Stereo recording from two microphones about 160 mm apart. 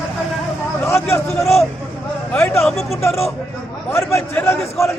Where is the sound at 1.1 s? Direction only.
15° left (ahead or behind).